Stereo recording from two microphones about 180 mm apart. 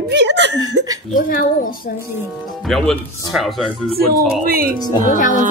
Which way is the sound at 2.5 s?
Centre (ahead or behind).